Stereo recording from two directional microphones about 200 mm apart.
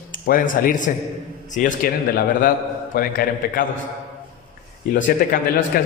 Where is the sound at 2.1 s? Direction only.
40° left (ahead or behind).